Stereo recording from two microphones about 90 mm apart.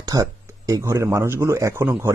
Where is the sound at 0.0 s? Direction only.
40° right (ahead or behind).